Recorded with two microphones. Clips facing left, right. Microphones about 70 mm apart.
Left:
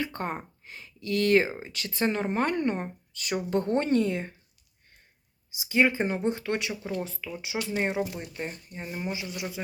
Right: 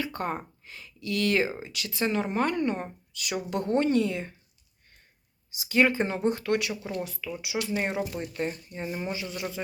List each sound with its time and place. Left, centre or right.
0.0 s speech: left
1.5 s speech: left
1.7 s a woman's voice: left
5.5 s speech: centre
7.0 s a woman's voice: left
7.9 s speech: centre